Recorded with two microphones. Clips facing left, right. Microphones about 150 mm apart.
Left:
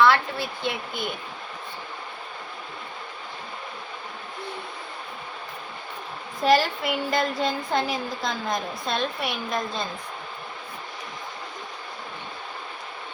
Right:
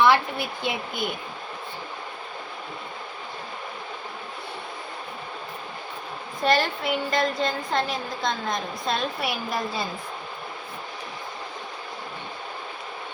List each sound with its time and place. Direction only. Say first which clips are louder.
0.0 s speech: even; 15° right (ahead or behind)
6.4 s a woman's voice: left 2 dB; centre (ahead or behind)